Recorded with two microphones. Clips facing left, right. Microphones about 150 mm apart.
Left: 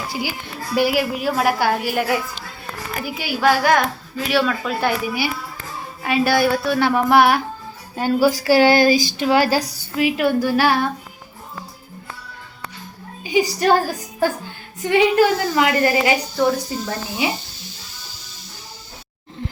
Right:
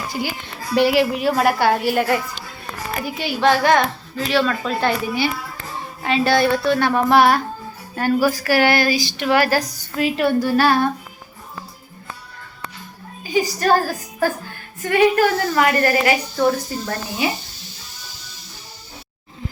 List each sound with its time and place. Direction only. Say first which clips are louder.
0.1 s a woman's voice: right 1 dB; 10° left (ahead or behind)
7.9 s a woman's voice: left 1 dB; 15° left (ahead or behind)
8.5 s speech: left 4 dB; 25° left (ahead or behind)
9.5 s a woman's voice: even; 10° left (ahead or behind)
13.6 s a woman's voice: left 1 dB; 15° left (ahead or behind)